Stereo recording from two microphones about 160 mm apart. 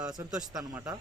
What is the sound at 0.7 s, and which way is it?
Speech, 20° right (ahead or behind).